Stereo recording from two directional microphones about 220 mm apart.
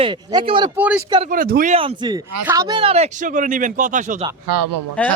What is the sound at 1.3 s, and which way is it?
Speech, 40° right (ahead or behind).